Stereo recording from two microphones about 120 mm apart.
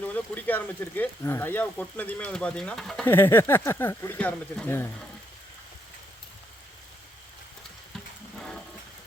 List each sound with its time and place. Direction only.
0.0 s speech: 15° left (ahead or behind)
3.0 s speech: 15° left (ahead or behind)
8.4 s a sound: 5° left (ahead or behind)